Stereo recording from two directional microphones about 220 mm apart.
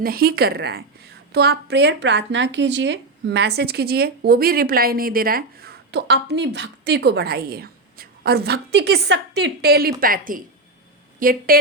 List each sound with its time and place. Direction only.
0.0 s a woman's voice: 45° right (ahead or behind)